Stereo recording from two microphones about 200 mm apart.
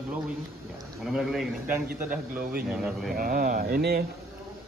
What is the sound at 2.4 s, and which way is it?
Speech, 45° right (ahead or behind).